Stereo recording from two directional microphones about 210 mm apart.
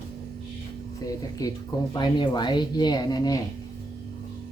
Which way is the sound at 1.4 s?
15° left (ahead or behind).